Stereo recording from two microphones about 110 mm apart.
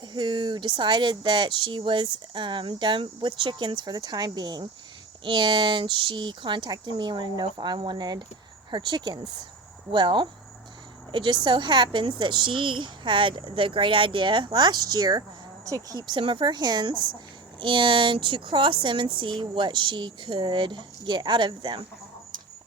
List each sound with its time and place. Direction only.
0.1 s speech: 45° right (ahead or behind)